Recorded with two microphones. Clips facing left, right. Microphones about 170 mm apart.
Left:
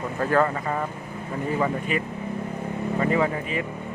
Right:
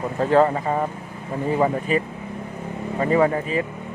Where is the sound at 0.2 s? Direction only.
25° right (ahead or behind).